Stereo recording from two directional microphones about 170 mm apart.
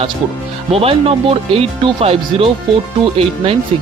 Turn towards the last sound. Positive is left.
turn(degrees=-35)  # may be behind; listen again after turning